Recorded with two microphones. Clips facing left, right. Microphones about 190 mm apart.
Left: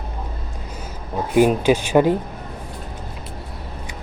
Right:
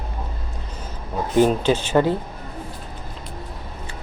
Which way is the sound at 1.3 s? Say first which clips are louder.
Left 2 dB; 10° left (ahead or behind).